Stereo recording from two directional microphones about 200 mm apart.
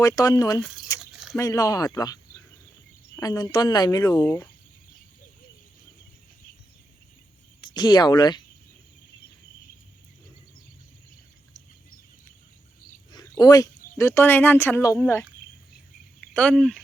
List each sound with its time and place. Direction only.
0.2 s speech: 20° left (ahead or behind)
0.9 s a sound: 5° right (ahead or behind)
1.4 s speech: 15° left (ahead or behind)
7.6 s speech: 20° left (ahead or behind)
13.1 s speech: 20° left (ahead or behind)
16.3 s speech: 5° left (ahead or behind)